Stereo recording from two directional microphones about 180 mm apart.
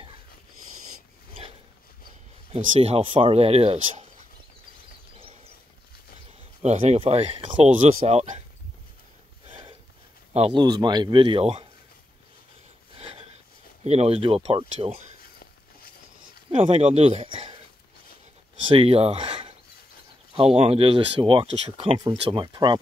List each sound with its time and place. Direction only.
2.5 s speech: 35° right (ahead or behind)
6.6 s speech: 35° right (ahead or behind)
9.5 s a sound: 25° right (ahead or behind)
10.3 s speech: 30° right (ahead or behind)
12.9 s a sound: 35° right (ahead or behind)
13.8 s speech: 35° right (ahead or behind)
16.5 s speech: 35° right (ahead or behind)
18.7 s speech: 30° right (ahead or behind)